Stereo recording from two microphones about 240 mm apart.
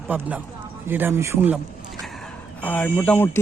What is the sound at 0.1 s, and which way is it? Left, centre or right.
Speech, centre.